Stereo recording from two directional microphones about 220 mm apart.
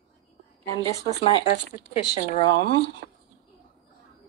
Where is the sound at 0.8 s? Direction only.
25° left (ahead or behind).